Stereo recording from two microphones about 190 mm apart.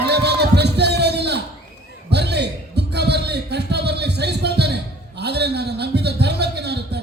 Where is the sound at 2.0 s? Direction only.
60° right (ahead or behind).